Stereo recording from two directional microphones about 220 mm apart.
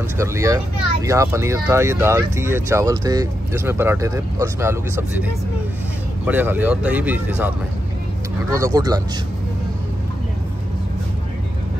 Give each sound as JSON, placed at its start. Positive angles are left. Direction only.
{"t": 0.2, "sound": "speech", "side_deg": -15}
{"t": 6.2, "sound": "speech", "side_deg": -10}